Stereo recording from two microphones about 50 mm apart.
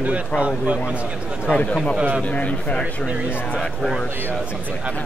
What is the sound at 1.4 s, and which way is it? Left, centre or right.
A man's voice, left.